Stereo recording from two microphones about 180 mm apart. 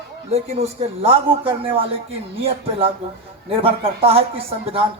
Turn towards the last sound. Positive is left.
turn(degrees=-35)  # may be behind; listen again after turning